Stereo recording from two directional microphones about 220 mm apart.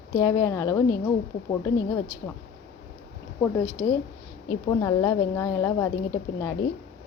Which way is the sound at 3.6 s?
10° left (ahead or behind).